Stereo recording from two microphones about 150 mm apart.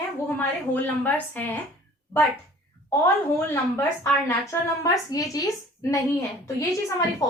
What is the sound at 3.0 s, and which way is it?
A woman's voice, 15° left (ahead or behind).